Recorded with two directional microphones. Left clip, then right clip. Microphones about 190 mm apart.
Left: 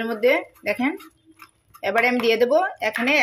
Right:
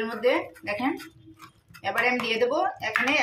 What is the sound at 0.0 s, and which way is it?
Speech, 45° left (ahead or behind).